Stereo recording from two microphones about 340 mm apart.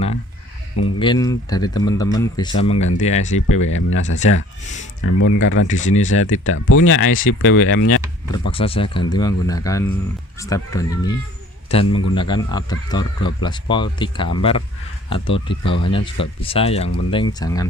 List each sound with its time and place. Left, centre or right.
0.9 s speech: centre
3.8 s speech: left
5.6 s speech: left
6.1 s speech: left
8.3 s speech: centre